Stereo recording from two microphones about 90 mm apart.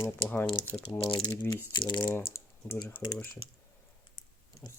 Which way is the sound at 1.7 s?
55° left (ahead or behind).